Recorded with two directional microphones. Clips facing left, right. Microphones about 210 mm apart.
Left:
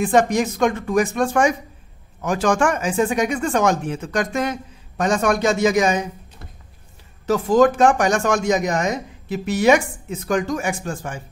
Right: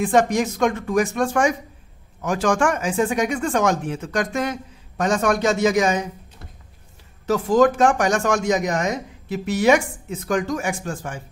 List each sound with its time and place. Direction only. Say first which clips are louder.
0.0 s speech: left 1 dB; 20° left (ahead or behind)
7.2 s speech: left 1 dB; 20° left (ahead or behind)